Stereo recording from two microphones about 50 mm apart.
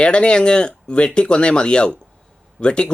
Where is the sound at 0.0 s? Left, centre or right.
Centre.